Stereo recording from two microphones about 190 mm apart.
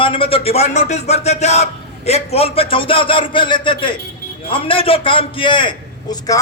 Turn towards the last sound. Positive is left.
turn(degrees=20)  # may be behind; listen again after turning